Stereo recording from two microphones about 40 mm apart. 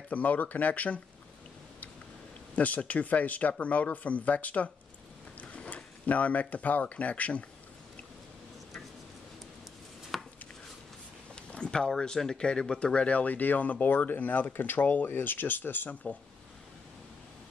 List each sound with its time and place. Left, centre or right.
0.1 s speech: left
2.5 s speech: left
6.0 s speech: left
10.1 s chopping: centre
11.3 s a sound: left
11.9 s speech: centre
12.7 s speech: left
15.0 s speech: left
15.9 s speech: left